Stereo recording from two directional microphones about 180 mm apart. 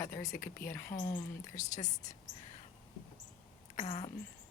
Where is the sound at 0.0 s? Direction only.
15° left (ahead or behind).